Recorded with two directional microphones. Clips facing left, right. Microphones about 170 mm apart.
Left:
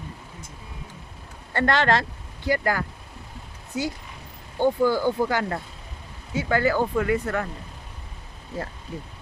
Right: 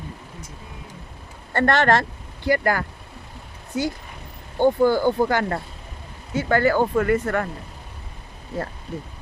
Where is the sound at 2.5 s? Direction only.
60° right (ahead or behind).